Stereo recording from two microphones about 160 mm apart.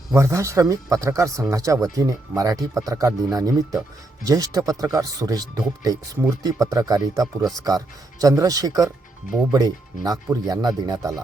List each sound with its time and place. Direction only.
0.1 s speech: 20° right (ahead or behind)